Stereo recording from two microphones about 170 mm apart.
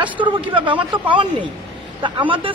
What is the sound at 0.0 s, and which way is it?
A woman's voice, 30° right (ahead or behind).